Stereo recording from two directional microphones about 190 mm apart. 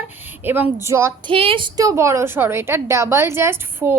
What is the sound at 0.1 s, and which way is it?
Speech, 10° right (ahead or behind).